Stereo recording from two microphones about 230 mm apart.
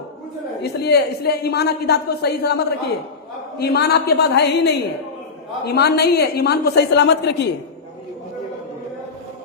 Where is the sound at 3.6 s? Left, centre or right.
Left.